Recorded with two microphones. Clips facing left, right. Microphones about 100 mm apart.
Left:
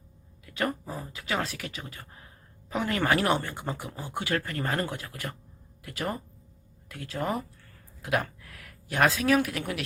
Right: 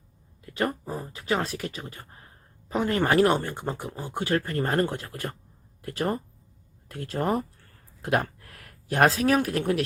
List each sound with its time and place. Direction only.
0.9 s speech: 25° right (ahead or behind)